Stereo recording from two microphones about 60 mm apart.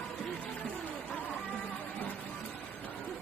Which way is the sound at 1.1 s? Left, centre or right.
Left.